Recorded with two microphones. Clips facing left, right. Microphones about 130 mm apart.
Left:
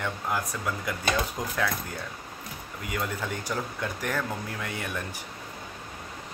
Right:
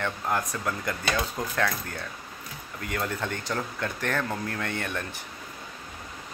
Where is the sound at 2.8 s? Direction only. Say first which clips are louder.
Right 1 dB; 10° left (ahead or behind).